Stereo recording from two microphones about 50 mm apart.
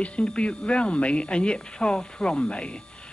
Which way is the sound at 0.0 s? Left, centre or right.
Left.